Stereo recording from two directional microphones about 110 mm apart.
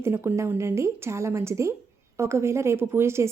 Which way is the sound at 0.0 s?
20° right (ahead or behind).